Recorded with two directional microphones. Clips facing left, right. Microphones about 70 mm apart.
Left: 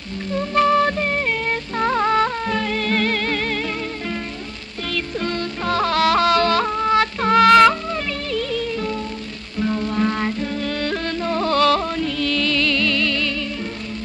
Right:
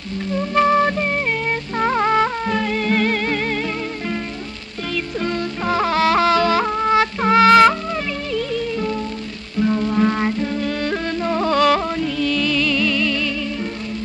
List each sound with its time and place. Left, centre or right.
0.8 s music: centre
1.8 s music: centre
2.2 s music: centre